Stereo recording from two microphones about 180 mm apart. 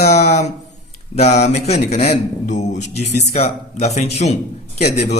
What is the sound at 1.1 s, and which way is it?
Speech, 35° left (ahead or behind).